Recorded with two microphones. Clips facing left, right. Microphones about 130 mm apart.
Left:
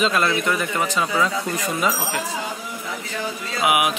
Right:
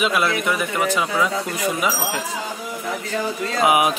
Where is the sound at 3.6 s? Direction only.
35° right (ahead or behind).